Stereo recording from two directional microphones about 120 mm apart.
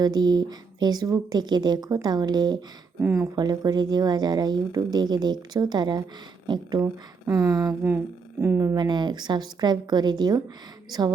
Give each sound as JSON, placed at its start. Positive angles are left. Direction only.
{"t": 0.0, "sound": "speech", "side_deg": -35}
{"t": 7.9, "sound": "speech", "side_deg": -15}
{"t": 8.7, "sound": "speech", "side_deg": -35}